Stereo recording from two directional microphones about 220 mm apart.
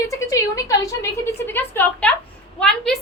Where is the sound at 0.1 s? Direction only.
15° left (ahead or behind).